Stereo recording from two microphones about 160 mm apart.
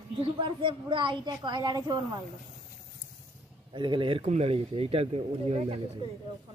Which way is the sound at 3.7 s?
30° right (ahead or behind).